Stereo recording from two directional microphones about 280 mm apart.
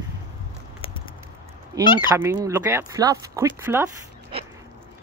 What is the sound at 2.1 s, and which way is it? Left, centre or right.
Speech, centre.